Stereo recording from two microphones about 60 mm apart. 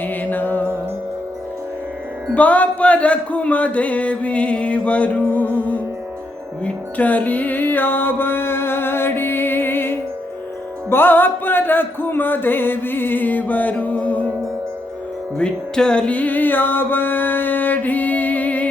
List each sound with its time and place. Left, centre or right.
0.0 s music: left
2.3 s music: left
15.4 s music: centre